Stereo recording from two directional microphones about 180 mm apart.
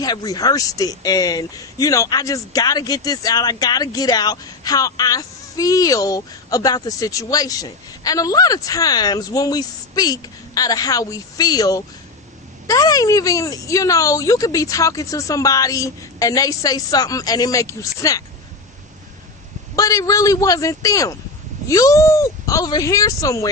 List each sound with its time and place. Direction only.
0.0 s speech: 20° left (ahead or behind)
19.7 s speech: 20° left (ahead or behind)